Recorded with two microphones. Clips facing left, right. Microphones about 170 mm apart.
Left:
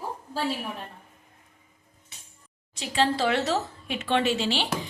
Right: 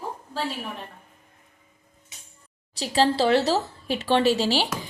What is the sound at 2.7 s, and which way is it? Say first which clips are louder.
A woman's voice: right 3 dB; 35° right (ahead or behind).